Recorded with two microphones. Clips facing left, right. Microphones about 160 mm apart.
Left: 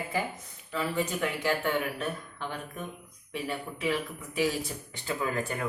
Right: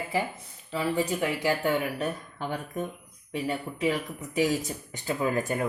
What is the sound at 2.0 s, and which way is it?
Speech, 40° right (ahead or behind).